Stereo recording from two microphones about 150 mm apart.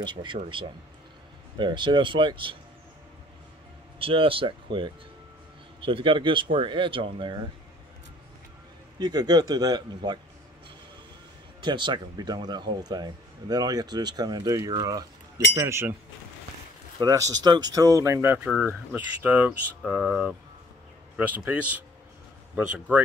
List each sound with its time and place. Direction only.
0.0 s speech: 30° right (ahead or behind)
1.6 s speech: 30° right (ahead or behind)
4.0 s speech: 35° right (ahead or behind)
9.0 s speech: 25° right (ahead or behind)
11.6 s speech: 30° right (ahead or behind)
17.0 s speech: 25° right (ahead or behind)